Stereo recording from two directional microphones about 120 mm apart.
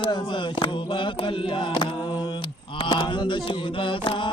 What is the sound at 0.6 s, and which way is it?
Mantra, 45° left (ahead or behind).